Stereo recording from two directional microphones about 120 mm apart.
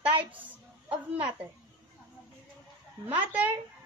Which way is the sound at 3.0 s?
15° right (ahead or behind).